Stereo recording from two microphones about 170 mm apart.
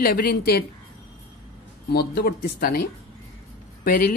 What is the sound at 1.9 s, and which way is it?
Speech, 70° left (ahead or behind).